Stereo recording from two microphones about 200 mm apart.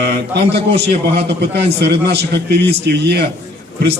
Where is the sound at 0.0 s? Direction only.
55° right (ahead or behind).